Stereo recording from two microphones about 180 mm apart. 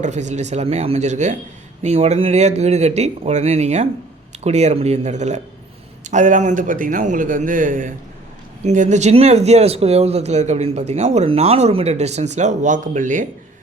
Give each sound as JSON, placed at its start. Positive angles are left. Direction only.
{"t": 0.0, "sound": "a man's voice", "side_deg": -40}